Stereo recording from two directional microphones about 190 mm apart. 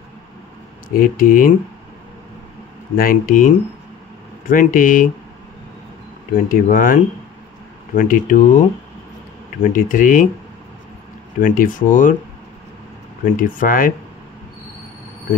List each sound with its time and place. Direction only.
0.9 s speech: 45° left (ahead or behind)
3.0 s speech: 45° left (ahead or behind)
6.3 s speech: 45° left (ahead or behind)
11.3 s speech: 45° left (ahead or behind)
13.2 s speech: 45° left (ahead or behind)